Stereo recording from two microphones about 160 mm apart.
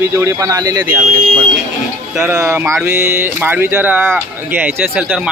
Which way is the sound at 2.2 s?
15° right (ahead or behind).